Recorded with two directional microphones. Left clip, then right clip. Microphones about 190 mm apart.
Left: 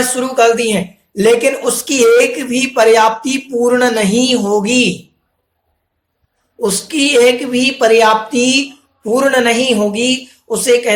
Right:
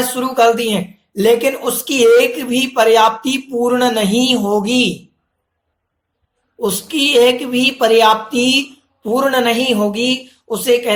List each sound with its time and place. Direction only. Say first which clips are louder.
0.2 s speech: left 1 dB; 25° right (ahead or behind)
6.6 s speech: left 2 dB; 25° right (ahead or behind)